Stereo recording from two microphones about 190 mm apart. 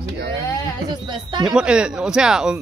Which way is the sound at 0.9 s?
20° right (ahead or behind).